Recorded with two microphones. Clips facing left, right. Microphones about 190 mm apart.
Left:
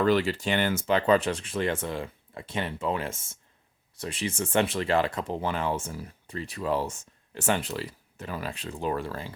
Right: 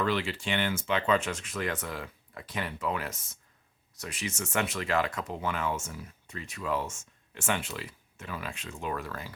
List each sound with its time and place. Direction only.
0.0 s speech: 40° left (ahead or behind)